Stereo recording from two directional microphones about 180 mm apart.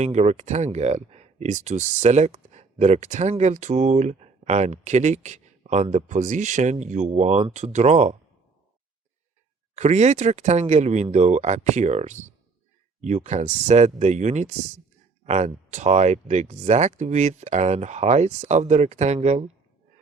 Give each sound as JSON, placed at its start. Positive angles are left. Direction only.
{"t": 0.0, "sound": "speech", "side_deg": -40}
{"t": 9.7, "sound": "speech", "side_deg": -40}